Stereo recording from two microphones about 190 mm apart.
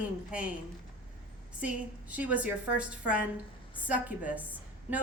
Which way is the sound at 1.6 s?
5° right (ahead or behind).